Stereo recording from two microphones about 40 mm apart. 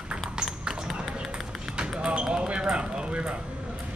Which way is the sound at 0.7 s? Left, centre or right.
Centre.